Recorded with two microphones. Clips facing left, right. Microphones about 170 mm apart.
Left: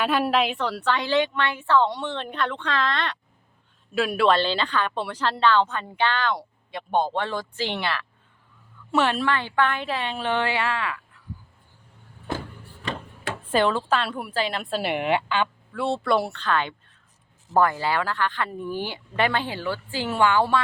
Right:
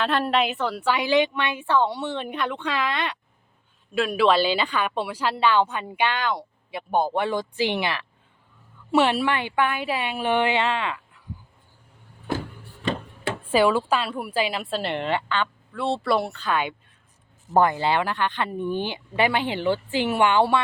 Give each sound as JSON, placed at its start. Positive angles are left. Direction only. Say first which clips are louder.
{"t": 0.0, "sound": "a woman's voice", "louder": "even", "side_deg": 10}
{"t": 3.9, "sound": "a woman's voice", "louder": "right 1 dB", "side_deg": 0}
{"t": 13.5, "sound": "a woman's voice", "louder": "right 2 dB", "side_deg": -10}
{"t": 14.8, "sound": "a woman's voice", "louder": "left 3 dB", "side_deg": 10}
{"t": 15.7, "sound": "speech", "louder": "even", "side_deg": 0}
{"t": 17.5, "sound": "speech", "louder": "right 2 dB", "side_deg": -20}